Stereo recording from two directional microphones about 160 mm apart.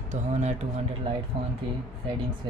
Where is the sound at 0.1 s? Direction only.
45° right (ahead or behind).